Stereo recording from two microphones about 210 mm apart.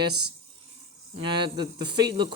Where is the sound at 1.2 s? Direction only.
25° right (ahead or behind).